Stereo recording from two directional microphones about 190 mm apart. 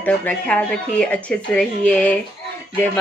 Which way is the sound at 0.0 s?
5° left (ahead or behind).